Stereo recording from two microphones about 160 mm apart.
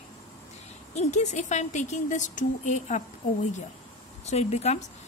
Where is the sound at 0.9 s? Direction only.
45° left (ahead or behind).